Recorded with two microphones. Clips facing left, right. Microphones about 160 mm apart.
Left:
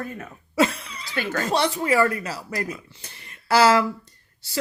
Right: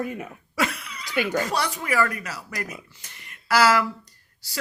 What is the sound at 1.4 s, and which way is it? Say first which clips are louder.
Speech: left 5 dB; 25° left (ahead or behind).